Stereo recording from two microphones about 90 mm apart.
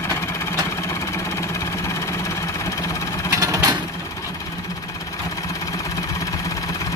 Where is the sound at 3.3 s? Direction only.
40° right (ahead or behind).